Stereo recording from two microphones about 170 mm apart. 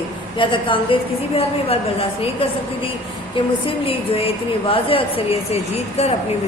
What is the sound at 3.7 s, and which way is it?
A woman's voice, 35° left (ahead or behind).